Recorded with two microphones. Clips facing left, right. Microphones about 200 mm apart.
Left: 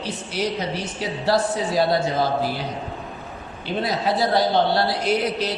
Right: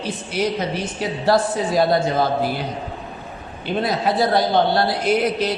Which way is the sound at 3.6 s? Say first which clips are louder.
Right 3 dB; 50° right (ahead or behind).